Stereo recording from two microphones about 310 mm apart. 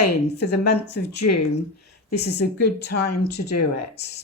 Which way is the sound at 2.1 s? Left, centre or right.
Left.